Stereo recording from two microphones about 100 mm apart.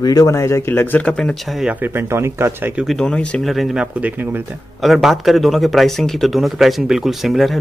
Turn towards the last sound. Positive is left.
turn(degrees=0)  # may be behind; listen again after turning